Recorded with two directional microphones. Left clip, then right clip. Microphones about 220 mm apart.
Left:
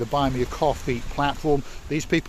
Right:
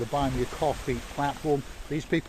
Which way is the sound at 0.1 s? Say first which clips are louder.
Left 6 dB; 45° left (ahead or behind).